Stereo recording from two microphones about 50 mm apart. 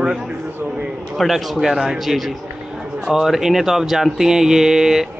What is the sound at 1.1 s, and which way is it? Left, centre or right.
A man's voice, centre.